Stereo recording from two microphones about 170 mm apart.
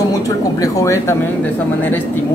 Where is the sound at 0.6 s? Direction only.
20° left (ahead or behind).